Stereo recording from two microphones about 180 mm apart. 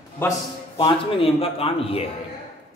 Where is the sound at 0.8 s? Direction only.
30° left (ahead or behind).